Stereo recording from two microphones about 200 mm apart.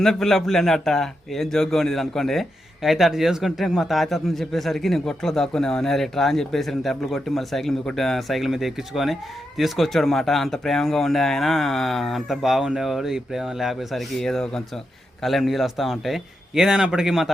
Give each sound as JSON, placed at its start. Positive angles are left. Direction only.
{"t": 0.0, "sound": "a man's voice", "side_deg": 0}